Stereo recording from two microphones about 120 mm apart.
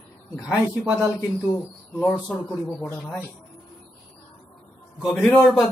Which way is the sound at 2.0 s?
10° left (ahead or behind).